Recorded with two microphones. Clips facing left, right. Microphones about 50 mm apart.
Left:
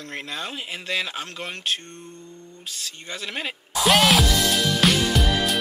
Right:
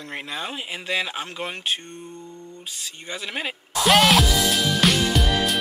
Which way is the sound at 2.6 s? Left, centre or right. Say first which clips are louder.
Left 3 dB; centre.